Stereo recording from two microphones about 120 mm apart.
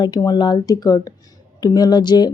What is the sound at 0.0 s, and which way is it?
A woman's voice, 35° left (ahead or behind).